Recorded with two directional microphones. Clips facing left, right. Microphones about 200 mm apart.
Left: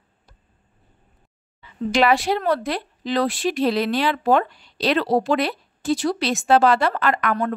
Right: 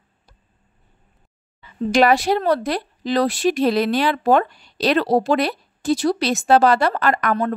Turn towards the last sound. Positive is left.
turn(degrees=-40)  # may be behind; listen again after turning